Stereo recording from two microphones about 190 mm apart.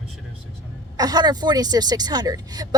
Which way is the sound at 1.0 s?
20° right (ahead or behind).